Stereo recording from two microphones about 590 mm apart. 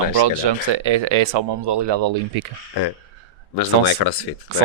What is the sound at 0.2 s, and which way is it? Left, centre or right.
Speech, right.